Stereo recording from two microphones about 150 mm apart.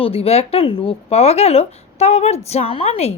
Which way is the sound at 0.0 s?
40° left (ahead or behind).